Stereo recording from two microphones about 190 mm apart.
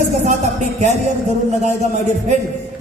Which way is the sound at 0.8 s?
35° right (ahead or behind).